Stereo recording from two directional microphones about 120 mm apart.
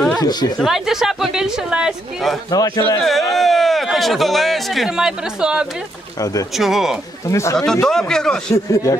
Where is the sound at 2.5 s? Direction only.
30° left (ahead or behind).